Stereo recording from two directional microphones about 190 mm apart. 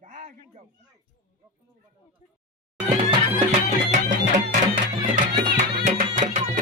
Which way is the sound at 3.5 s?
40° right (ahead or behind).